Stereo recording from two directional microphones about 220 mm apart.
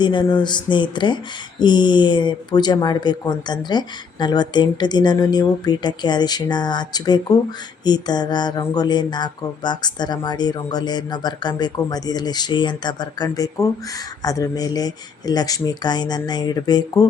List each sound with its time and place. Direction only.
0.0 s speech: 20° left (ahead or behind)